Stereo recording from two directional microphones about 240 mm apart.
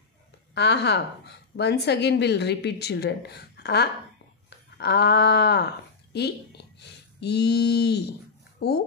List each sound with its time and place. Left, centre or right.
0.6 s a woman's voice: left
4.5 s a sound: left
6.1 s speech: left